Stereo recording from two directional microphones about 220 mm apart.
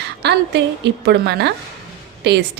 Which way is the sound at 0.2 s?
50° right (ahead or behind).